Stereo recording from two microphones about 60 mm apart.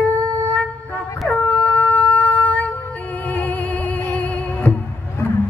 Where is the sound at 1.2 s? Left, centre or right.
Left.